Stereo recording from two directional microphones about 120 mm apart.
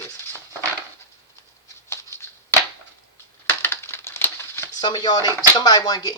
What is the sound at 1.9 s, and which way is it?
Shuffling cards, 20° left (ahead or behind).